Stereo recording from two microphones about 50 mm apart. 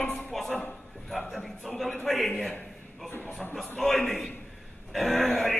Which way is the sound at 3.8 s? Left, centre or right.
Centre.